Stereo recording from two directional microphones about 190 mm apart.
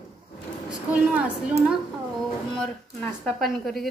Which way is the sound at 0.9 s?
5° right (ahead or behind).